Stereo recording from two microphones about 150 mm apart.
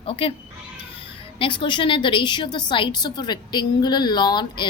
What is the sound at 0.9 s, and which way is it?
A woman's voice, 35° left (ahead or behind).